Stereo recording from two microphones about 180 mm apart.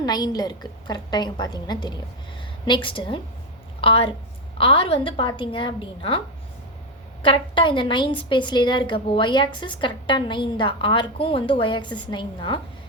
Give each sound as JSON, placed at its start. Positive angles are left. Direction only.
{"t": 0.0, "sound": "a woman's voice", "side_deg": 20}